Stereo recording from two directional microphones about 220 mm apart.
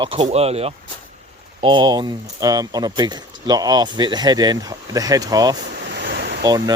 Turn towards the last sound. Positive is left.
turn(degrees=-15)  # may be behind; listen again after turning